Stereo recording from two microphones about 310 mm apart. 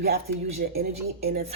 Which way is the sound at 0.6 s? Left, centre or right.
Right.